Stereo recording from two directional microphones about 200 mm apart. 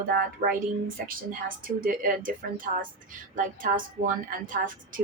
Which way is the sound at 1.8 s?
45° right (ahead or behind).